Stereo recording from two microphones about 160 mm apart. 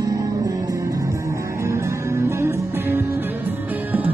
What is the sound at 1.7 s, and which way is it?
Music, 15° right (ahead or behind).